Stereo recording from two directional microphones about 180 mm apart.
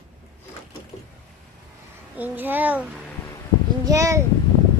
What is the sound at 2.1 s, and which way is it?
A woman's voice, 10° right (ahead or behind).